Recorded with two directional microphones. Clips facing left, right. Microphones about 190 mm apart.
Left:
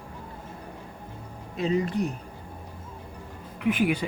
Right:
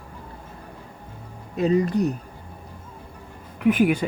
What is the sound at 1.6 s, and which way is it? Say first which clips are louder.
Speech: right 5 dB; 40° right (ahead or behind).